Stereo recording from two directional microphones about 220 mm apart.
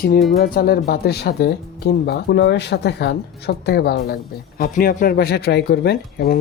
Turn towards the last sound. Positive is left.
turn(degrees=45)  # may be behind; listen again after turning